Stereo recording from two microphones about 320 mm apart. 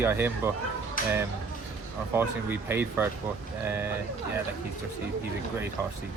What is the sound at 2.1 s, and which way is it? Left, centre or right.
Speech, centre.